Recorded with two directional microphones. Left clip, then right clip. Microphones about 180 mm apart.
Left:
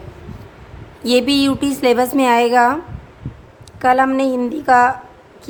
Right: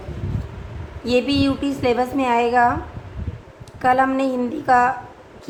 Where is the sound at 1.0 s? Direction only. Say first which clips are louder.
Left 4 dB; 45° left (ahead or behind).